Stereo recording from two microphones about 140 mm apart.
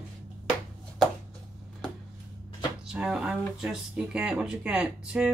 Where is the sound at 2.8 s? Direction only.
5° right (ahead or behind).